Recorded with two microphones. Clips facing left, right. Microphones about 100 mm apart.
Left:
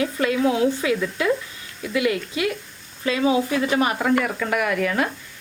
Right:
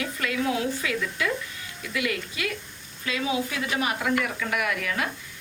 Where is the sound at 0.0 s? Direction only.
30° left (ahead or behind).